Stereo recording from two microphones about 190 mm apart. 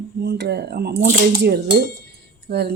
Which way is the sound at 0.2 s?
60° right (ahead or behind).